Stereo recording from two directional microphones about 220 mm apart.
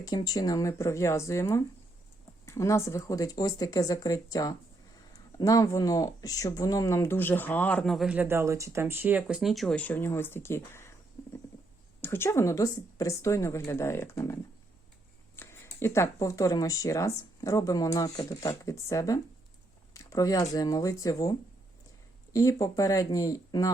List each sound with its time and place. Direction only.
0.0 s speech: 20° left (ahead or behind)
15.4 s speech: 10° left (ahead or behind)